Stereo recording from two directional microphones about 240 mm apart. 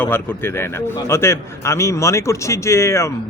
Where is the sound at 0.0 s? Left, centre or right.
Centre.